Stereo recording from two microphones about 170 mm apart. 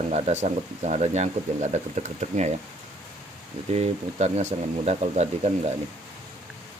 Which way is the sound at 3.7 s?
40° right (ahead or behind).